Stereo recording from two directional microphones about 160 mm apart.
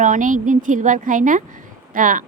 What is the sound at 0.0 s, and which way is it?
Speech, 55° right (ahead or behind).